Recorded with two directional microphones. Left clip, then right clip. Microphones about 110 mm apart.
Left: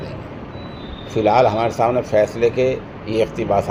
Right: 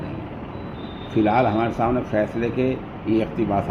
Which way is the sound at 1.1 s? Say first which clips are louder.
Left 5 dB; 90° left.